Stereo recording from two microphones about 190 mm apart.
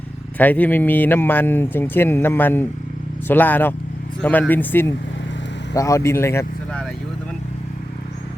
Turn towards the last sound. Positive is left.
turn(degrees=5)  # may be behind; listen again after turning